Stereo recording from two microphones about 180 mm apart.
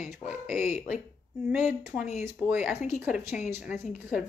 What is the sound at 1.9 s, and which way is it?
Speech, 40° left (ahead or behind).